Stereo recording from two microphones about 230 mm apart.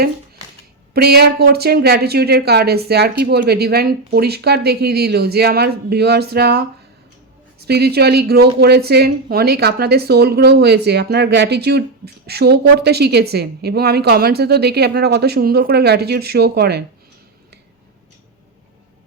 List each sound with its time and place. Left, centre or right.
0.9 s speech: right